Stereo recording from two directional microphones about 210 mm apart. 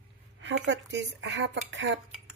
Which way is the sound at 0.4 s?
60° right (ahead or behind).